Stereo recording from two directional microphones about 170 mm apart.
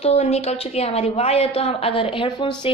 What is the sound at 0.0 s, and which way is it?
A woman's voice, 35° left (ahead or behind).